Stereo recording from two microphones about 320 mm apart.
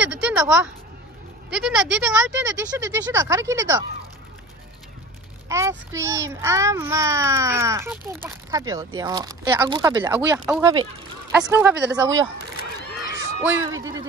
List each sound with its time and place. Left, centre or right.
0.0 s a sound: centre
1.5 s a child's voice: centre
5.5 s a child's voice: centre
13.1 s speech: centre